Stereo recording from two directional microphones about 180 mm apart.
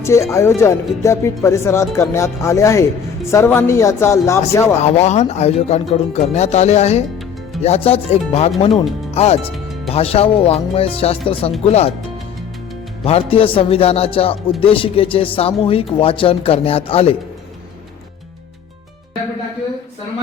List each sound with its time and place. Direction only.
0.0 s speech: 15° left (ahead or behind)
4.8 s speech: 35° left (ahead or behind)
13.1 s speech: 30° left (ahead or behind)